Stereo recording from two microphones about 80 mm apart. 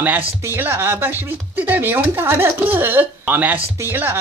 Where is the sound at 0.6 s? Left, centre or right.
Right.